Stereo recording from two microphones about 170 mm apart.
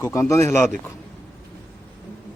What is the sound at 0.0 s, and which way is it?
Speech, 15° left (ahead or behind).